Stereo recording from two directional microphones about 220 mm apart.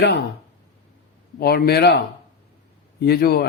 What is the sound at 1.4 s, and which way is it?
Speech, 45° left (ahead or behind).